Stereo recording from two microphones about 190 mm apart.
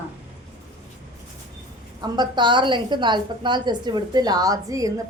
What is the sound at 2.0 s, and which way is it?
A woman's voice, 25° right (ahead or behind).